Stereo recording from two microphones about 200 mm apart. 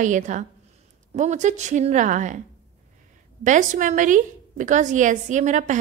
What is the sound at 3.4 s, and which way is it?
A woman's voice, 40° right (ahead or behind).